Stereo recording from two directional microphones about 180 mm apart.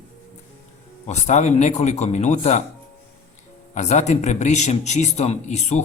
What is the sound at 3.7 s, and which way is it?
A man's voice, 40° left (ahead or behind).